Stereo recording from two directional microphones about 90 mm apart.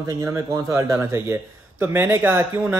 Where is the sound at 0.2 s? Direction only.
30° right (ahead or behind).